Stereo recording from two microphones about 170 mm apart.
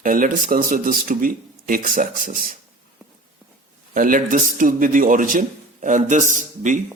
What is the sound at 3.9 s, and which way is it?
A man's voice, 55° right (ahead or behind).